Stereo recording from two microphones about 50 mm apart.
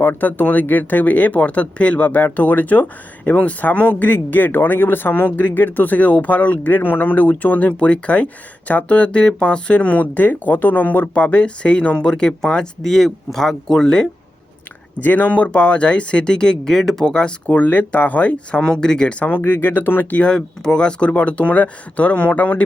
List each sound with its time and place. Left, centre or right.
0.0 s speech: left; by 14.1 s centre
15.0 s speech: left; by 17.3 s centre
17.4 s speech: left
18.6 s speech: centre
19.6 s speech: left
20.1 s speech: centre